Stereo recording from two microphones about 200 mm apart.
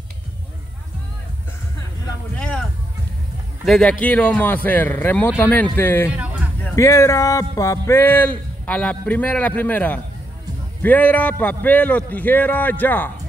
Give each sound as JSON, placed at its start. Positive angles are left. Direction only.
{"t": 2.3, "sound": "speech", "side_deg": 5}
{"t": 3.6, "sound": "speech", "side_deg": 0}